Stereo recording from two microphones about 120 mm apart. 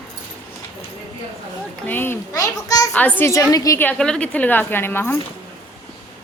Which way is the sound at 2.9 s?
15° left (ahead or behind).